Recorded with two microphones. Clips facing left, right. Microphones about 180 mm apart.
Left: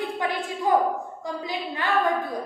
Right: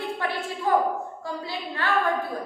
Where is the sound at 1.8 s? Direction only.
15° left (ahead or behind).